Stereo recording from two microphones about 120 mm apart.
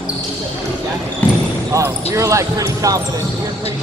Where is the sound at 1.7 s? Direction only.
25° right (ahead or behind).